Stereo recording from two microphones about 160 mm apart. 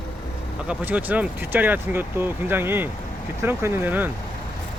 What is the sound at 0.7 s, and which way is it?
Speech, 10° right (ahead or behind).